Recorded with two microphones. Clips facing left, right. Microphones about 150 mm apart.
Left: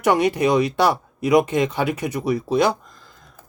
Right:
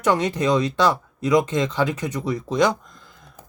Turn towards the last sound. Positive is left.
turn(degrees=0)  # may be behind; listen again after turning